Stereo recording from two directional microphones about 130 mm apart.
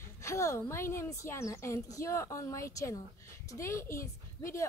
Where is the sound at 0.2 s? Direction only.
20° left (ahead or behind).